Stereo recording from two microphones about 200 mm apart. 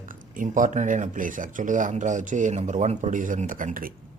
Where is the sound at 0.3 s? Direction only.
40° right (ahead or behind).